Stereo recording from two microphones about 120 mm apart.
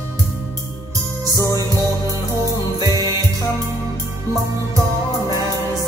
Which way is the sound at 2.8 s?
30° right (ahead or behind).